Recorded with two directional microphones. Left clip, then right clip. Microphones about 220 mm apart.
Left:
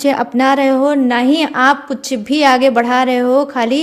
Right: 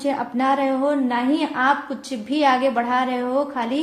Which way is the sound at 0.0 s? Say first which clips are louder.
Left 8 dB; 45° left (ahead or behind).